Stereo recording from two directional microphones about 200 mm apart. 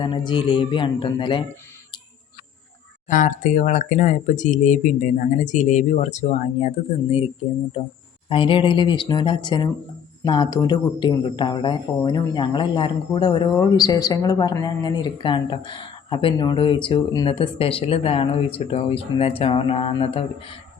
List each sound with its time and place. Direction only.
0.0 s speech: 25° left (ahead or behind)
3.1 s speech: 40° left (ahead or behind)
8.3 s speech: 25° left (ahead or behind)